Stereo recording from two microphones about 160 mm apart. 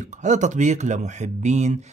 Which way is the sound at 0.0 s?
50° right (ahead or behind).